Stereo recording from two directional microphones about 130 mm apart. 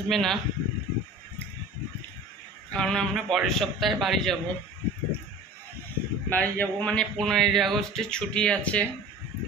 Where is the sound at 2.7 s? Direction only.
5° left (ahead or behind).